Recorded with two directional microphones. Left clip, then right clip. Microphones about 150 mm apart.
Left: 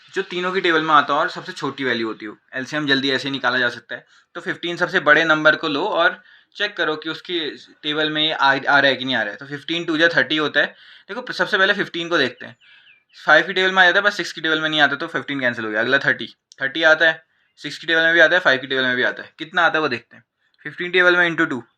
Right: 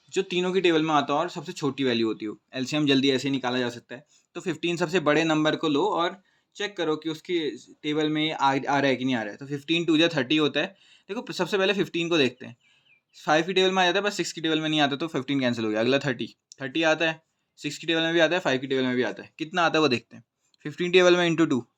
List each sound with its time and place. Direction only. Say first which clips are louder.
0.1 s speech: left 3 dB; 65° right (ahead or behind)
19.5 s speech: left 6 dB; 80° right
20.9 s speech: left 4 dB; 90° right; by 21.6 s 65° right (ahead or behind)